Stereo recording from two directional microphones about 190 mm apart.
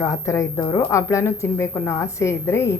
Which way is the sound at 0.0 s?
15° left (ahead or behind).